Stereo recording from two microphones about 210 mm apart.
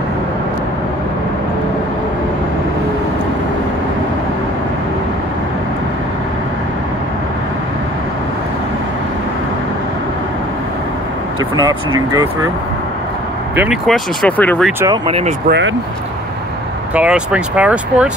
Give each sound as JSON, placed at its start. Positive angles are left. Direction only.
{"t": 12.1, "sound": "speech", "side_deg": -15}
{"t": 13.6, "sound": "speech", "side_deg": 0}
{"t": 15.0, "sound": "speech", "side_deg": -30}
{"t": 15.4, "sound": "speech", "side_deg": -55}
{"t": 16.9, "sound": "speech", "side_deg": -5}